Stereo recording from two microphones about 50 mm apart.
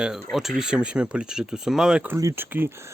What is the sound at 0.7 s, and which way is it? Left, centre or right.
Speech, right.